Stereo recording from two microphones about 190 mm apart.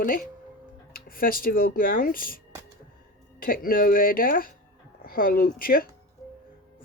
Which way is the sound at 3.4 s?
50° left (ahead or behind).